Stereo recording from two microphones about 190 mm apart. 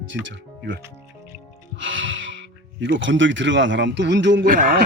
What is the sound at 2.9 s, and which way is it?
A man's voice, 80° right.